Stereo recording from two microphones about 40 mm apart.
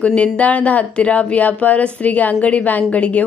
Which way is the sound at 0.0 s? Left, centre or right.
Left.